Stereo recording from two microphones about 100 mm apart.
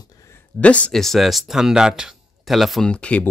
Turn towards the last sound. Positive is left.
turn(degrees=10)  # may be behind; listen again after turning